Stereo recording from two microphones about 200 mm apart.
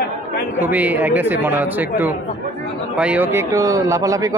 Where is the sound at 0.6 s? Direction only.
10° right (ahead or behind).